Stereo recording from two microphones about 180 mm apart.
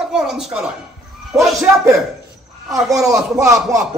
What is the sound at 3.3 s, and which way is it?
Speech, 15° right (ahead or behind).